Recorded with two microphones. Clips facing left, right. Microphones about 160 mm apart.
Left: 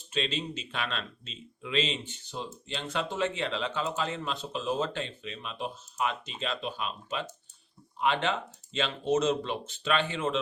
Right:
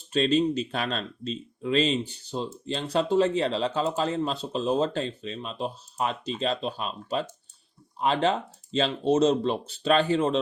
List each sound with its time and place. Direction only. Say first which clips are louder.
0.1 s speech: right 10 dB; 40° right (ahead or behind)